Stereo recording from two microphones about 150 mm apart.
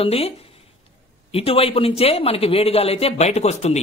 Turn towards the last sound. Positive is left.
turn(degrees=45)  # may be behind; listen again after turning